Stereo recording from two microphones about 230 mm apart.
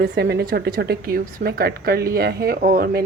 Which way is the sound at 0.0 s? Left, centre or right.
Right.